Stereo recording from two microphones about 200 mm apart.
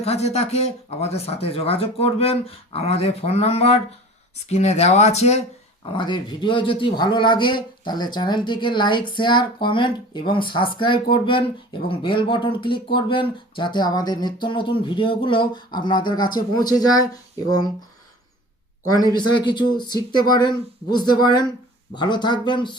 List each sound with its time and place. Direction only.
0.0 s speech: 30° left (ahead or behind)
19.1 s speech: 20° left (ahead or behind)